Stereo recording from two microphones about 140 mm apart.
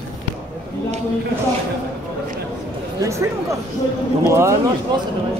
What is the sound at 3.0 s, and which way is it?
Speech, 20° right (ahead or behind).